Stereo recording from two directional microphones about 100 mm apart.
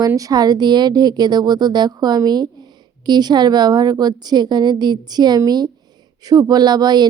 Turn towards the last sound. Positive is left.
turn(degrees=-45)  # may be behind; listen again after turning